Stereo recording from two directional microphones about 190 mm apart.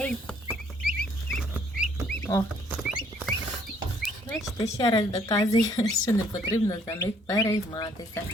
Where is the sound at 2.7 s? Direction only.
Centre (ahead or behind).